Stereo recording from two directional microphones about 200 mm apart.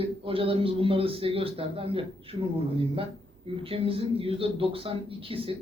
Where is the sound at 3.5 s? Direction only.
25° right (ahead or behind).